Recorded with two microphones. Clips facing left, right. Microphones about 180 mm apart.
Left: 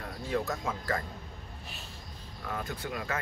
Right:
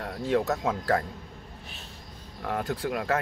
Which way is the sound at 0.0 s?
70° right (ahead or behind).